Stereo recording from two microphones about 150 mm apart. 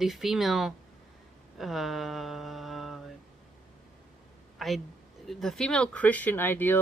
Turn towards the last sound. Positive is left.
turn(degrees=15)  # may be behind; listen again after turning